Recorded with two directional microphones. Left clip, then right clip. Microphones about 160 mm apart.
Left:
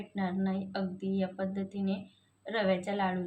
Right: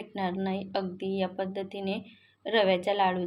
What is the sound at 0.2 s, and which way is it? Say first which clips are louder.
Speech: right 4 dB; 25° right (ahead or behind).